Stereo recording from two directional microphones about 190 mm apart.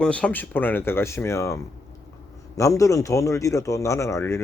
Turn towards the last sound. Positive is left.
turn(degrees=15)  # may be behind; listen again after turning